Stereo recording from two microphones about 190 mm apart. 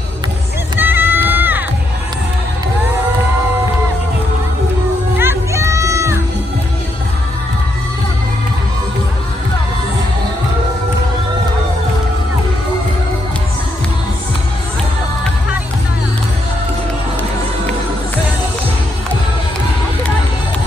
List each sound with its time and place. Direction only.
0.7 s crowd: 10° right (ahead or behind)
5.2 s music: 15° right (ahead or behind)